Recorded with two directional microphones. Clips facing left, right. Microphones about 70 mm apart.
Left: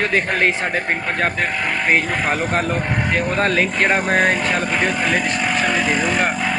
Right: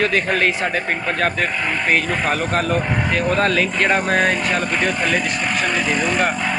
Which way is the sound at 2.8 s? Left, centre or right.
Centre.